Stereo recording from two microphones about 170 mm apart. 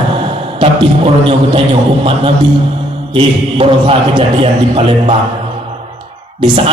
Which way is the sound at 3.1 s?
35° right (ahead or behind).